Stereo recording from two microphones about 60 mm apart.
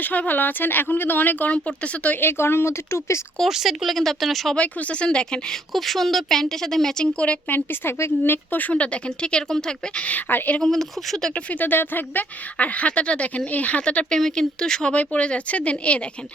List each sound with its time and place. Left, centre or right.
0.0 s speech: left
2.2 s speech: left
3.5 s speech: centre
4.5 s speech: left
5.7 s speech: centre
7.2 s speech: left
7.5 s speech: left
10.6 s speech: centre
11.3 s speech: left
14.1 s speech: centre